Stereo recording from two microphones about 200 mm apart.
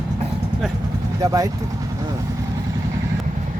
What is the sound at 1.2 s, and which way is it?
Speech, 15° right (ahead or behind).